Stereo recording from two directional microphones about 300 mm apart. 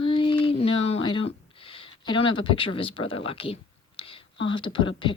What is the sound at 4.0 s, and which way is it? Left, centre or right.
Whispering, centre.